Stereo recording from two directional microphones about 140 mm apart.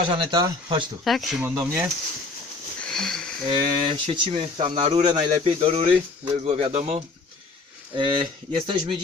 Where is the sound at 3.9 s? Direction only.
35° right (ahead or behind).